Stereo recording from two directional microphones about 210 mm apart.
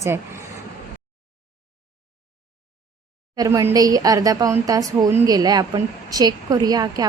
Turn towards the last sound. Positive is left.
turn(degrees=-20)  # may be behind; listen again after turning